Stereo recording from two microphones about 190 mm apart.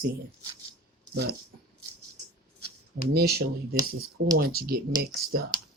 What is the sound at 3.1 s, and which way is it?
Speech, 55° right (ahead or behind).